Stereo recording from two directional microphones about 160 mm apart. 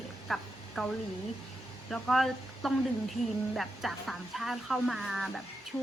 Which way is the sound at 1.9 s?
Centre (ahead or behind).